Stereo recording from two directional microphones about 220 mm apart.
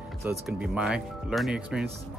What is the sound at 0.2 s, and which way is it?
Speech, 10° right (ahead or behind).